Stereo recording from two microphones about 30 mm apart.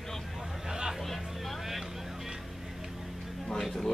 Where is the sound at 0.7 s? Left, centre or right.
Centre.